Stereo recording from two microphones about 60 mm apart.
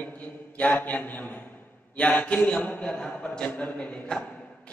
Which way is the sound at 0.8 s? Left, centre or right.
Left.